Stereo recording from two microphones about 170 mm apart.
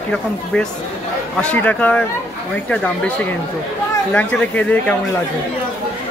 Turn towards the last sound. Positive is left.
turn(degrees=10)  # may be behind; listen again after turning